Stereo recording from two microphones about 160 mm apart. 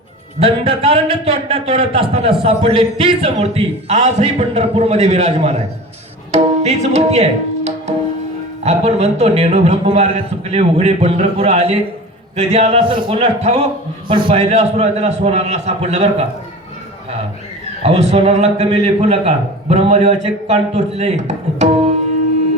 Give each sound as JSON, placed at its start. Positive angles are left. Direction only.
{"t": 0.3, "sound": "a man's voice", "side_deg": -40}
{"t": 6.3, "sound": "tabla", "side_deg": -45}
{"t": 8.6, "sound": "speech", "side_deg": -40}
{"t": 14.1, "sound": "speech", "side_deg": -30}
{"t": 17.8, "sound": "a man's voice", "side_deg": -40}